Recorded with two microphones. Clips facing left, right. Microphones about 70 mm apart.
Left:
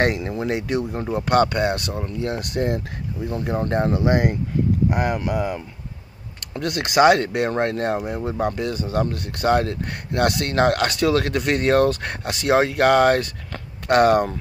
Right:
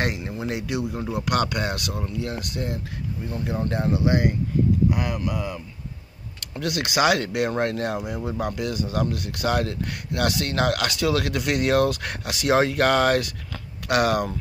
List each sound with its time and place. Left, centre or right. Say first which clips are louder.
0.0 s speech: left 6 dB; left
0.5 s speech: left 3 dB; left
1.0 s speech: left 7 dB; left
2.2 s speech: left 6 dB; left
6.6 s speech: left 5 dB; left
12.5 s speech: left 4 dB; left
13.8 s speech: left 6 dB; left